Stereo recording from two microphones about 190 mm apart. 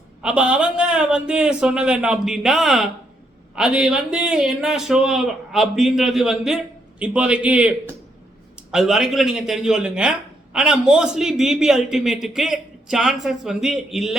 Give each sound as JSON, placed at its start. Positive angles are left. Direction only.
{"t": 0.2, "sound": "speech", "side_deg": -5}